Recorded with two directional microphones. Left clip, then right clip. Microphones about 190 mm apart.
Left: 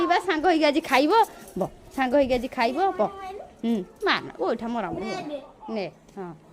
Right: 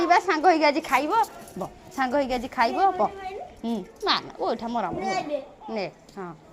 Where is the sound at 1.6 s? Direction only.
35° left (ahead or behind).